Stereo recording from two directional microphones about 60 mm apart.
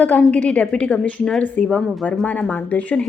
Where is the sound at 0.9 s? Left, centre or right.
Left.